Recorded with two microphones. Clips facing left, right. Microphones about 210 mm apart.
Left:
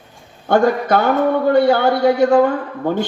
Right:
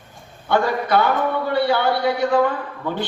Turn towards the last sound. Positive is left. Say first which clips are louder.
# left 6 dB
turn(degrees=45)  # may be behind; listen again after turning